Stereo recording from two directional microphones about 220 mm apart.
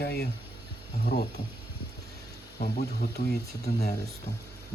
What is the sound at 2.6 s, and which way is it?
Speech, 45° left (ahead or behind).